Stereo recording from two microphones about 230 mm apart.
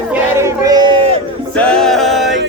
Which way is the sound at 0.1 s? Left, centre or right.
Centre.